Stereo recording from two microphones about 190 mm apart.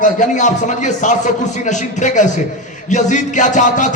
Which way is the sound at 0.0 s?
40° left (ahead or behind).